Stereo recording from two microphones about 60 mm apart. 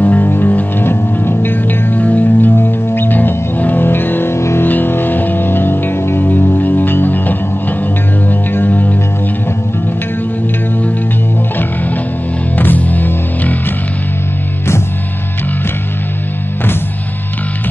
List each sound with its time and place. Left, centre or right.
0.0 s music: left
4.4 s music: left
4.6 s music: left
12.5 s music: left